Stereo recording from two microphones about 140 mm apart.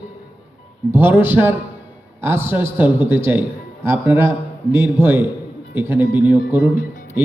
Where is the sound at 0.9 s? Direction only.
15° right (ahead or behind).